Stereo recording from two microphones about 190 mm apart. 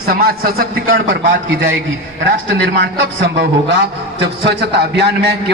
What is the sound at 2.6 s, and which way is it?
A man's voice, 70° right (ahead or behind).